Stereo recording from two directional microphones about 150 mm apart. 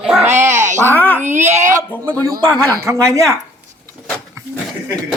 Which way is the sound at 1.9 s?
10° left (ahead or behind).